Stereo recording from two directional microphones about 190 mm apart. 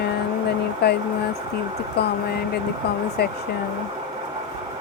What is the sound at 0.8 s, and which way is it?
Speech, 60° left (ahead or behind).